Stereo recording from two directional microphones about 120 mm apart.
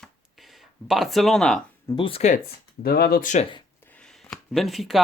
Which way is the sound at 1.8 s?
40° left (ahead or behind).